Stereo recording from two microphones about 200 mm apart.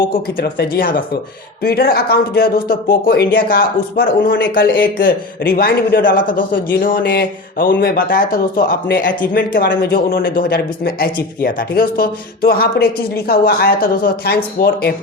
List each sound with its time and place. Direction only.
0.0 s speech: 45° left (ahead or behind)